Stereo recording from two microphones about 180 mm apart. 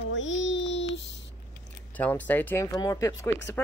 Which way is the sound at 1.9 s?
10° left (ahead or behind).